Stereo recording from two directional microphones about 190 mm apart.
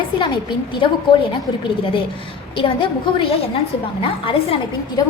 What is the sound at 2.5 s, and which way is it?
A woman's voice, 25° left (ahead or behind).